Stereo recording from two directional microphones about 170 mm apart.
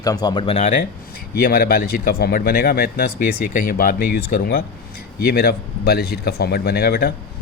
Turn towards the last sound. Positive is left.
turn(degrees=60)  # may be behind; listen again after turning